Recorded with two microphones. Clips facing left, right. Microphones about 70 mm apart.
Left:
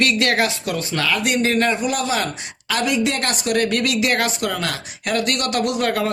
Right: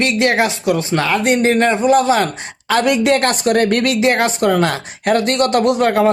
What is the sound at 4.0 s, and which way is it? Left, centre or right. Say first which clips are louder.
Speech: right 6 dB; right.